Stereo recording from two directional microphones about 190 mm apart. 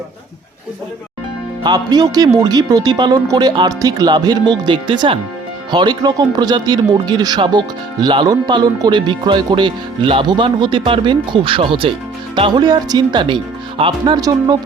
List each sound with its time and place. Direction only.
1.6 s speech: 20° right (ahead or behind)